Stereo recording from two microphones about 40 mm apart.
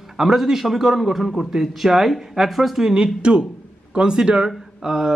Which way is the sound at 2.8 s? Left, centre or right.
Centre.